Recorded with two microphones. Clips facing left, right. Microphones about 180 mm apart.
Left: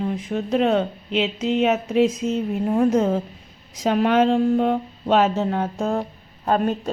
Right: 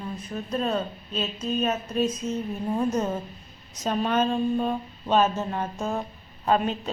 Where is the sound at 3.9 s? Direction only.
75° left (ahead or behind).